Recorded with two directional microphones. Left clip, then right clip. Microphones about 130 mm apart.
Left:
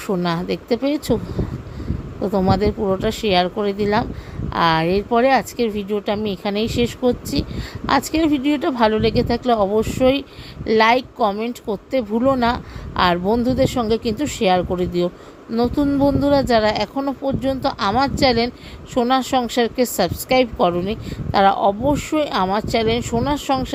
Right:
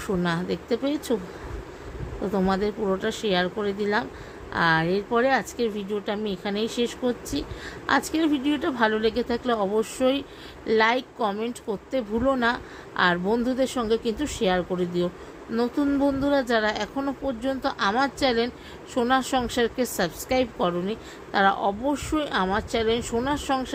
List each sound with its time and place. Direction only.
0.1 s speech: 40° left (ahead or behind)
2.5 s a woman's voice: 45° left (ahead or behind)